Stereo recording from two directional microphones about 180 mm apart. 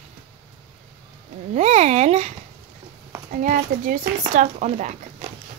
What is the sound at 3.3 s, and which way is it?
Speech, 50° right (ahead or behind).